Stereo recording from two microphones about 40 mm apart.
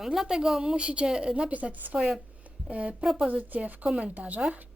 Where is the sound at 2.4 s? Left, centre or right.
Right.